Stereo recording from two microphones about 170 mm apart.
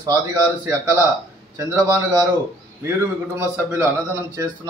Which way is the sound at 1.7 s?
15° right (ahead or behind).